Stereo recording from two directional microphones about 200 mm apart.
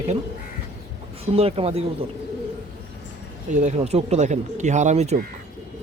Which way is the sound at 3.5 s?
35° right (ahead or behind).